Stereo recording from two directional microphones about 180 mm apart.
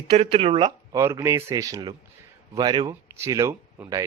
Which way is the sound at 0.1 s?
30° right (ahead or behind).